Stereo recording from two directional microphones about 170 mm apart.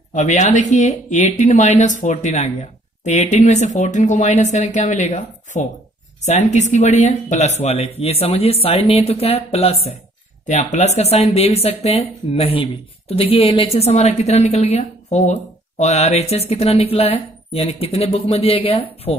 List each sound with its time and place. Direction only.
0.1 s a woman's voice: 45° left (ahead or behind)